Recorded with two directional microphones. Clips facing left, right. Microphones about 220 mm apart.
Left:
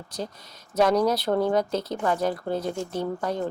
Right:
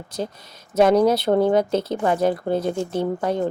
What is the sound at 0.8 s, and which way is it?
Speech, 25° right (ahead or behind).